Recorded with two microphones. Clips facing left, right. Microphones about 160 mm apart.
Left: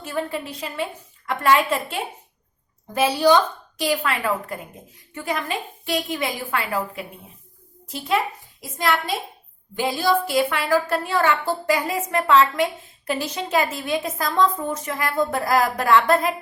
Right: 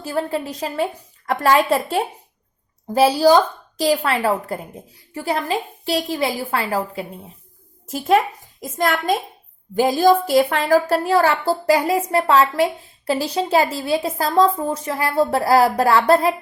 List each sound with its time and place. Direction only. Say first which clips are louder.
0.0 s a woman's voice: right 4 dB; 35° right (ahead or behind)
7.9 s a child's voice: right 6 dB; 45° right (ahead or behind)